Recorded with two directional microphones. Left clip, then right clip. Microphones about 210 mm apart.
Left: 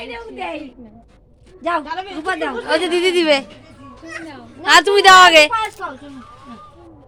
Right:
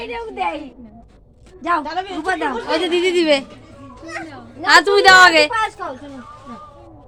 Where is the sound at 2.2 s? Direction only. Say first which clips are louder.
Right 1 dB; 20° right (ahead or behind).